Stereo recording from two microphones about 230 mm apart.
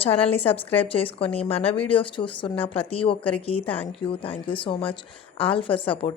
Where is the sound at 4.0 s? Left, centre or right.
Left.